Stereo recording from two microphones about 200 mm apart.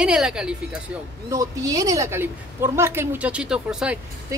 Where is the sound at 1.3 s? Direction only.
15° right (ahead or behind).